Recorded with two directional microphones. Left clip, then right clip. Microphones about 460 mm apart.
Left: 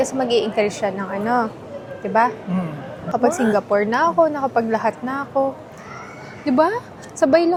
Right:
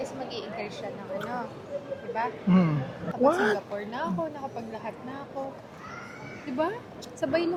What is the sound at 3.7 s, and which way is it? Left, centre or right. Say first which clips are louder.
A woman's voice: left 16 dB; left.